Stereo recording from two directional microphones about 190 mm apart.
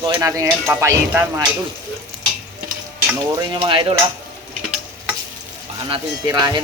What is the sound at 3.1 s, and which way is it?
Speech, 20° right (ahead or behind).